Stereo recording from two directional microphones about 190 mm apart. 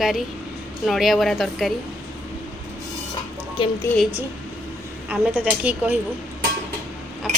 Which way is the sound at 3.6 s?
25° left (ahead or behind).